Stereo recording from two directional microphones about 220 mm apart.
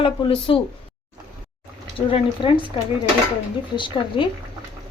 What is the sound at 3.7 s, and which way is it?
Speech, 20° left (ahead or behind).